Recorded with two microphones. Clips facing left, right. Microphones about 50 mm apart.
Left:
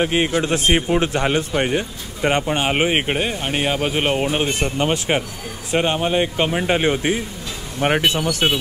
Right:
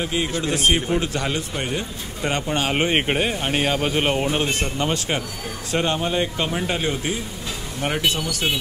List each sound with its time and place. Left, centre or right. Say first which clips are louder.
0.0 s a man's voice: left 5 dB; left
2.9 s a man's voice: left 1 dB; centre; by 8.5 s left